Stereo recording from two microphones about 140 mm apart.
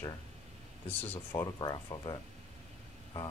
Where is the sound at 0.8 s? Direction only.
15° left (ahead or behind).